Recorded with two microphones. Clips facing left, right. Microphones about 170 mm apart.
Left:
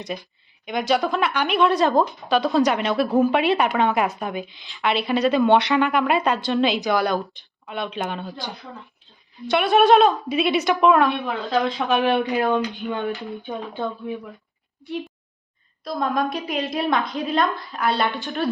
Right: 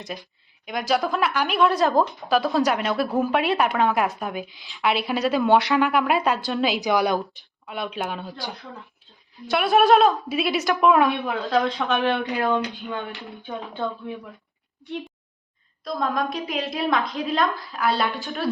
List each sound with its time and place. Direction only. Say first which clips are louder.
0.0 s a woman's voice: left 4 dB; centre (ahead or behind)
6.8 s a woman's voice: even; 15° right (ahead or behind)
7.7 s a woman's voice: left 1 dB; 5° right (ahead or behind)
12.3 s speech: left 2 dB; 20° left (ahead or behind)
15.8 s a woman's voice: left 2 dB; centre (ahead or behind)